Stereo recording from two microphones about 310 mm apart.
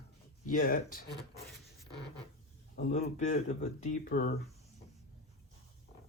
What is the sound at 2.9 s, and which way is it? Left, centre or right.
Speech, left.